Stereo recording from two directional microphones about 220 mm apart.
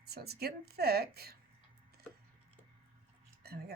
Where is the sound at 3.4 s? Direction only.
45° right (ahead or behind).